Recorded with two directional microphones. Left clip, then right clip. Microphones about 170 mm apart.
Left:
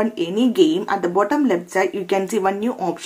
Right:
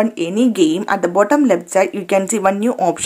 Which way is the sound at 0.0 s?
40° right (ahead or behind).